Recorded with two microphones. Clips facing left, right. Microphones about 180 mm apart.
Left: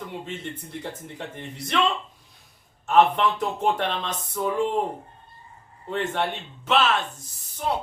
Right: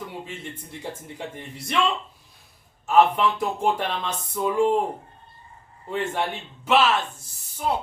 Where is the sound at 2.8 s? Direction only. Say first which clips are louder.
Even; 10° right (ahead or behind).